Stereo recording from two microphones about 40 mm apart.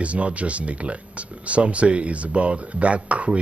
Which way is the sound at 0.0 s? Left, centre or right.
Right.